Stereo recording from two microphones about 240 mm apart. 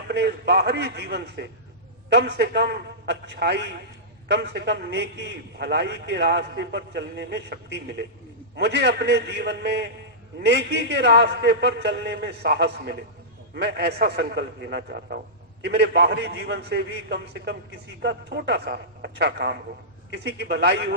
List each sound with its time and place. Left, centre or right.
0.1 s a man's voice: right